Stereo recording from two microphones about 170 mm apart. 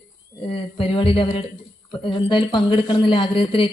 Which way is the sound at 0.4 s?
30° left (ahead or behind).